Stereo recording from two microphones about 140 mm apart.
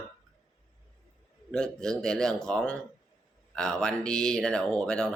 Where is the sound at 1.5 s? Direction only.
5° left (ahead or behind).